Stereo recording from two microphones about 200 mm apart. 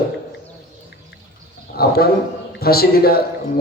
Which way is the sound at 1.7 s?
50° left (ahead or behind).